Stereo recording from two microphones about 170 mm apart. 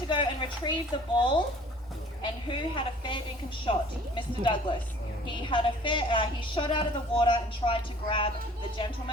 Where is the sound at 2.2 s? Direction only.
30° left (ahead or behind).